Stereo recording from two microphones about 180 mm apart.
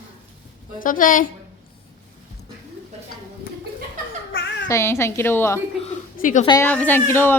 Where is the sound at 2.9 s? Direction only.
35° right (ahead or behind).